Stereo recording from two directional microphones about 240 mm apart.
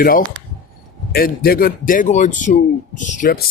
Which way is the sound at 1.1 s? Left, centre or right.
Left.